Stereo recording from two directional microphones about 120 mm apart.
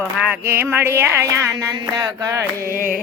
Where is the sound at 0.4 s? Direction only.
20° right (ahead or behind).